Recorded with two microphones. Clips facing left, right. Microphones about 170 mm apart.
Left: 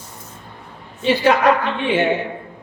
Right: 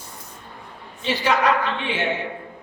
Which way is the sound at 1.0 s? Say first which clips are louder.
Left 6 dB; 55° left (ahead or behind).